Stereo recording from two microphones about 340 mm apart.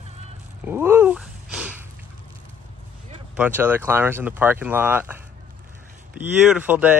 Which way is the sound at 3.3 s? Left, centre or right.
Centre.